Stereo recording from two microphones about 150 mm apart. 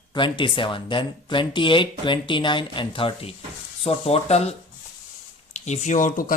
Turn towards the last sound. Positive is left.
turn(degrees=65)  # may be behind; listen again after turning